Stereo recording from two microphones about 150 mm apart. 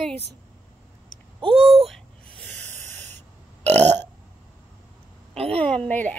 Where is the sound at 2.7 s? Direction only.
50° right (ahead or behind).